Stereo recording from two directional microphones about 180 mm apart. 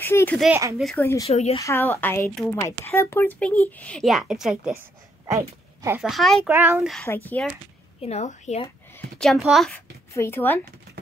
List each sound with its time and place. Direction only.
0.0 s speech: 10° left (ahead or behind)
1.3 s a woman's voice: 35° left (ahead or behind)
1.6 s speech: 15° left (ahead or behind); by 4.7 s 5° right (ahead or behind)
5.2 s a sound: 15° right (ahead or behind)
5.9 s a woman's voice: centre (ahead or behind)
6.5 s a child's voice: 10° right (ahead or behind)
7.2 s speech: 10° left (ahead or behind)
8.0 s a woman's voice: 40° left (ahead or behind)
9.2 s a woman's voice: centre (ahead or behind)
10.1 s speech: 15° left (ahead or behind)